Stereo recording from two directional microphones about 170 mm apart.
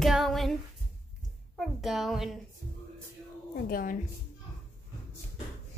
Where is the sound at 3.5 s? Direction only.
60° left (ahead or behind).